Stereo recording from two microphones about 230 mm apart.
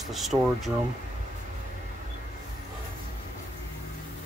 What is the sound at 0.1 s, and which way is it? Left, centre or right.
Speech, centre.